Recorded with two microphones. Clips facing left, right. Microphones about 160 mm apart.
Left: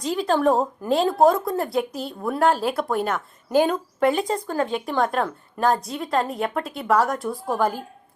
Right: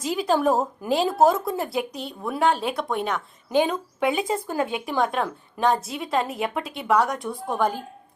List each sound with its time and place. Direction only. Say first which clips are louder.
0.0 s speech: left 1 dB; centre (ahead or behind)